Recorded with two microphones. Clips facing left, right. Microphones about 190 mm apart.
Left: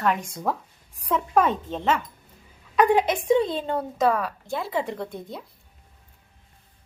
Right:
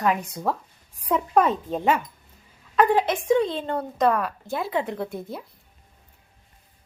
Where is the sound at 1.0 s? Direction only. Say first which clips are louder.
Right 1 dB; 10° right (ahead or behind).